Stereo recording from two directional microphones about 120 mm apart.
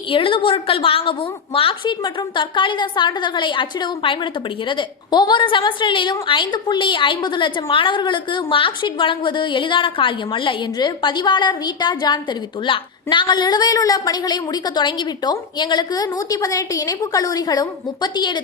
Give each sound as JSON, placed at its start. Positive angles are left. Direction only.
{"t": 0.1, "sound": "a woman's voice", "side_deg": 45}